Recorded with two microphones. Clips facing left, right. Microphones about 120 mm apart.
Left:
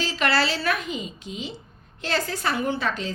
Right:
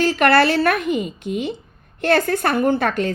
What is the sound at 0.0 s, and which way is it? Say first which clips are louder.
A woman's voice: right 9 dB; 55° right (ahead or behind).